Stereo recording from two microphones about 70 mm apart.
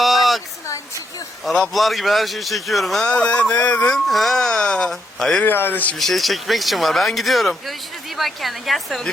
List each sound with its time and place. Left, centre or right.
0.0 s a sound: centre
1.5 s speech: centre
3.1 s speech: centre
3.9 s speech: centre
5.4 s speech: left
6.0 s speech: centre